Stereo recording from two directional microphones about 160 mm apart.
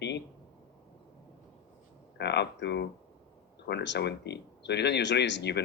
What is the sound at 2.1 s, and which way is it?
Speech, 90° left.